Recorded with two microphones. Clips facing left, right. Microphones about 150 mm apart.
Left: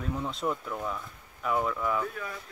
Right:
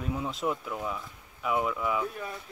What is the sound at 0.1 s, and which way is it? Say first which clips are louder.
Speech: even; 5° right (ahead or behind).